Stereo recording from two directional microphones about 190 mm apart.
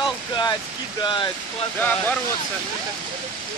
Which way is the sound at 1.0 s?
25° left (ahead or behind).